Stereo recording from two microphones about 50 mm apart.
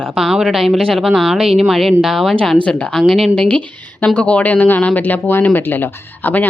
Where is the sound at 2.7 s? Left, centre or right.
Centre.